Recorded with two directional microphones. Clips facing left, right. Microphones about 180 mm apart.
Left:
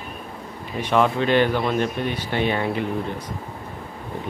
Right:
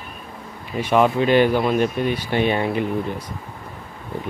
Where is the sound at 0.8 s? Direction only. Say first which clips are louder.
Right 3 dB; 10° right (ahead or behind).